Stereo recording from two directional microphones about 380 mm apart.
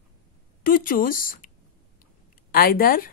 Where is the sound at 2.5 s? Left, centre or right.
Left.